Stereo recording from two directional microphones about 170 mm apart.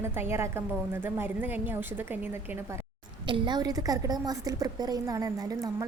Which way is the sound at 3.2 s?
30° right (ahead or behind).